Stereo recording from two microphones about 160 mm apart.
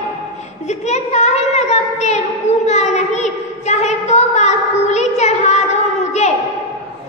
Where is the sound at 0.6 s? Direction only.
45° left (ahead or behind).